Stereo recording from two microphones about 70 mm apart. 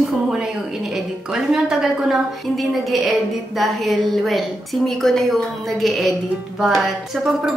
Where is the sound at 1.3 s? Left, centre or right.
Centre.